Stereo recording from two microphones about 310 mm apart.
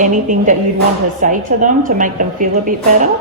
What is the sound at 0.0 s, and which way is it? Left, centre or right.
Speech, right.